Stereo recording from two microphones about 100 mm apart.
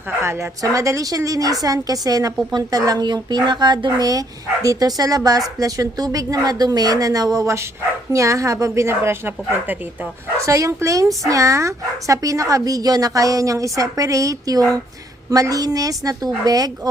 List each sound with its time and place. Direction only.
0.2 s speech: 30° right (ahead or behind)